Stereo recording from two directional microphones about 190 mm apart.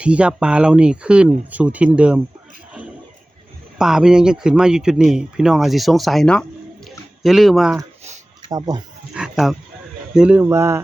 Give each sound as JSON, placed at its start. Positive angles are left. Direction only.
{"t": 0.0, "sound": "speech", "side_deg": -5}
{"t": 3.8, "sound": "speech", "side_deg": -5}
{"t": 8.4, "sound": "speech", "side_deg": -20}
{"t": 9.1, "sound": "speech", "side_deg": 0}